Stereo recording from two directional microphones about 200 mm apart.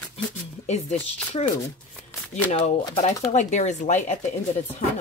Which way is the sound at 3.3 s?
35° left (ahead or behind).